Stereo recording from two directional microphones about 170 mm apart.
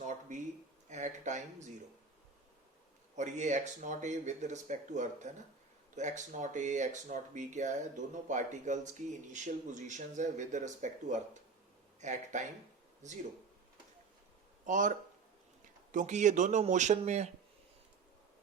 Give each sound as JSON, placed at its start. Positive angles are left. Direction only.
{"t": 0.0, "sound": "a sound", "side_deg": -45}
{"t": 0.9, "sound": "speech", "side_deg": -45}
{"t": 3.2, "sound": "speech", "side_deg": -45}
{"t": 14.7, "sound": "speech", "side_deg": -50}